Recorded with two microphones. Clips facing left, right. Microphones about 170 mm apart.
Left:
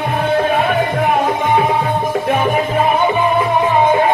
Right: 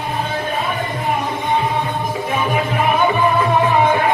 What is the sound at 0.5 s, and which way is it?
Music, 70° left (ahead or behind).